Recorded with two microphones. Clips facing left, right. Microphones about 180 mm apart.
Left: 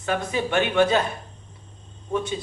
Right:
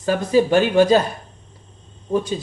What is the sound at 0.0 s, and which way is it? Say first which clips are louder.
Speech: right 8 dB; 35° right (ahead or behind).